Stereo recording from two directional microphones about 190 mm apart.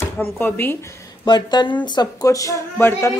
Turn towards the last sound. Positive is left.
turn(degrees=15)  # may be behind; listen again after turning